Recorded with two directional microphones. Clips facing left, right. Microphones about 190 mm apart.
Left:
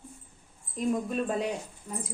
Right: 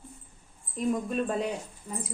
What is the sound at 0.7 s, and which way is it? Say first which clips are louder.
Speech: even; centre (ahead or behind).